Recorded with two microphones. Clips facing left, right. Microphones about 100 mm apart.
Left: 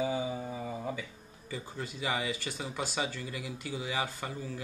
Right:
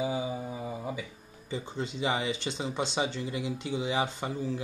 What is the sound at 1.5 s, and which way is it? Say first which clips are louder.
Speech: right 5 dB; 25° right (ahead or behind).